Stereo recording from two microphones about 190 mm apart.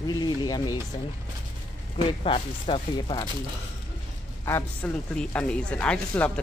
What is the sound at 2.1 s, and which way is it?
Speech, 30° left (ahead or behind).